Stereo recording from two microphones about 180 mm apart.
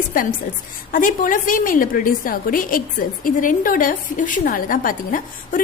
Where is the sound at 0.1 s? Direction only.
50° left (ahead or behind).